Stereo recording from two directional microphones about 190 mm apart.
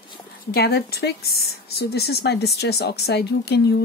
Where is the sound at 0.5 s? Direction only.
55° left (ahead or behind).